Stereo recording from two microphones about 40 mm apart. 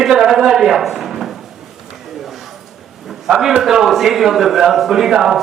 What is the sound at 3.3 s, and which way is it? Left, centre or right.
A man's voice, centre.